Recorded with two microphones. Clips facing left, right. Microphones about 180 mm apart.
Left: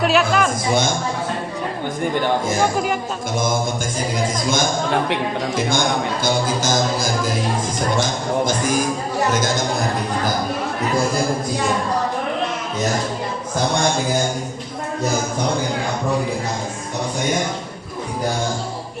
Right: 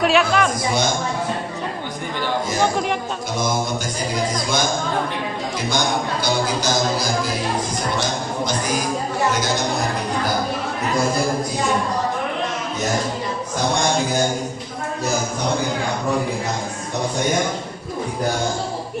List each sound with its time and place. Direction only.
0.0 s a man's voice: centre (ahead or behind)
6.2 s speech: 45° left (ahead or behind)